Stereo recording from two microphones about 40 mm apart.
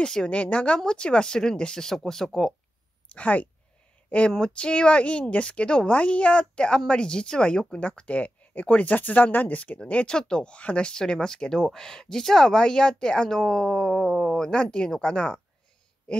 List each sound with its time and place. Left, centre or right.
0.0 s speech: centre
0.3 s speech: left; by 2.5 s centre
3.2 s speech: left
4.3 s speech: left
10.0 s speech: centre
14.0 s a sound: centre
14.3 s speech: centre